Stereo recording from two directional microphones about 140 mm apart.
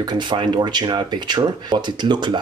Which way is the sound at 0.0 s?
30° right (ahead or behind).